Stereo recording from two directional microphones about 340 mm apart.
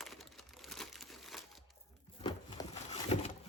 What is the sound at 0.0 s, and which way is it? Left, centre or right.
Crumpling, centre.